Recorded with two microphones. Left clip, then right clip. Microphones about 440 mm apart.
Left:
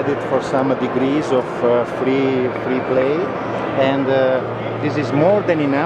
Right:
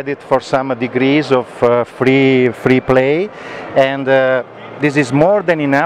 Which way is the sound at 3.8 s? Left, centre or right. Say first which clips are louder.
Right 5 dB; right.